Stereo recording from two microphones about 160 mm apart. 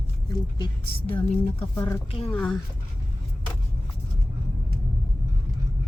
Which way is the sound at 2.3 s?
5° left (ahead or behind).